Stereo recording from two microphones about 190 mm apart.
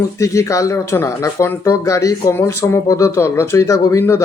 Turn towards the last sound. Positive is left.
turn(degrees=15)  # may be behind; listen again after turning